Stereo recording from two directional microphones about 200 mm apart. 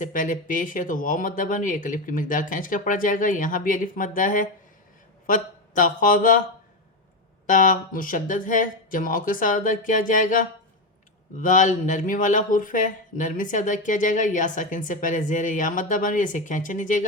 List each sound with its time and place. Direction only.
0.0 s speech: 40° left (ahead or behind)
7.4 s speech: 40° left (ahead or behind)